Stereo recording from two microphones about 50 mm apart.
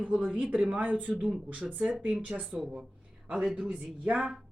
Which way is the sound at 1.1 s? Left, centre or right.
Centre.